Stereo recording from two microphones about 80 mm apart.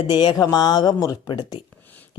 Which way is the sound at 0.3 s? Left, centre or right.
Left.